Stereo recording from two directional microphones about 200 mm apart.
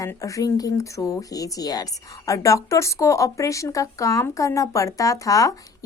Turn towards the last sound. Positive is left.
turn(degrees=15)  # may be behind; listen again after turning